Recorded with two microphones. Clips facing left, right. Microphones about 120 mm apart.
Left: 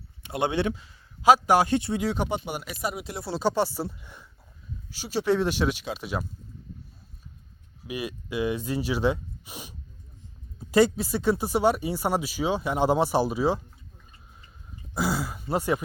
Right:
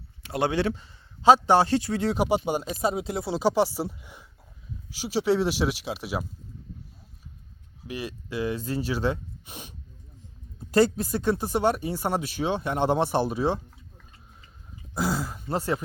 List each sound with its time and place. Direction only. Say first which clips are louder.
0.2 s speech: right 1 dB; 20° left (ahead or behind)
0.7 s a man's voice: right 1 dB; 5° left (ahead or behind)
2.1 s speech: right 5 dB; 10° right (ahead or behind)
2.4 s speech: right 6 dB; 20° right (ahead or behind); by 6.2 s 5° right (ahead or behind)
7.9 s speech: left 1 dB; 10° left (ahead or behind)
14.9 s speech: even; 5° left (ahead or behind)